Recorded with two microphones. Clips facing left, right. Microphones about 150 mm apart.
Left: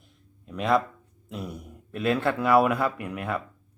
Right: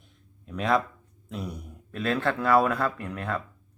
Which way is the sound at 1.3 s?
Centre (ahead or behind).